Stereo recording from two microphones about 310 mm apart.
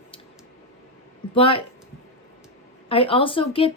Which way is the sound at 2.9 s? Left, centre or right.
Centre.